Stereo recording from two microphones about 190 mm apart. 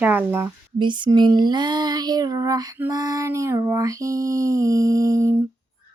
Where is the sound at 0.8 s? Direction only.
25° right (ahead or behind).